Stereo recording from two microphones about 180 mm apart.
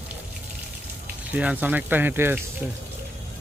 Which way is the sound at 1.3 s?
5° right (ahead or behind).